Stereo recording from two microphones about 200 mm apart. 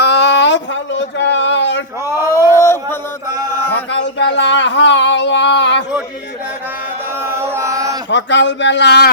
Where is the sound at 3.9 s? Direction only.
60° left (ahead or behind).